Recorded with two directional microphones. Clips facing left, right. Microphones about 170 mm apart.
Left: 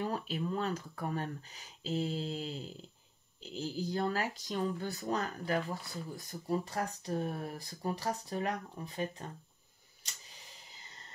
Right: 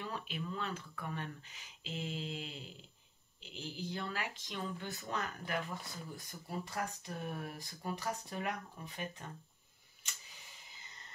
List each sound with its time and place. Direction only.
0.0 s speech: 40° left (ahead or behind)